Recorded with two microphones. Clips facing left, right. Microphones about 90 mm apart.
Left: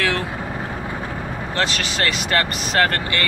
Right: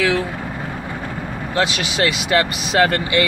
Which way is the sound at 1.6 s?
10° right (ahead or behind).